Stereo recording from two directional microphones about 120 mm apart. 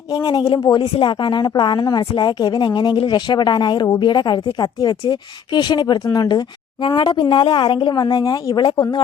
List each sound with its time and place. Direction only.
0.1 s a woman's voice: 35° left (ahead or behind)